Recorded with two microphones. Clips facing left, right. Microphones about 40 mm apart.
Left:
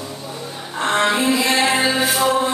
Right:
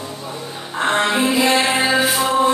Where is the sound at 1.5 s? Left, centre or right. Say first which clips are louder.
Right 1 dB; centre.